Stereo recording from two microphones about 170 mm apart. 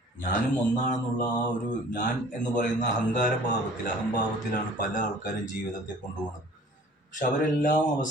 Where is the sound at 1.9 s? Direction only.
50° left (ahead or behind).